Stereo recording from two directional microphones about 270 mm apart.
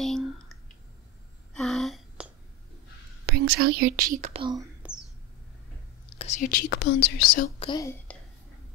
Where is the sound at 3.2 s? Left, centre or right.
Right; by 4.6 s centre.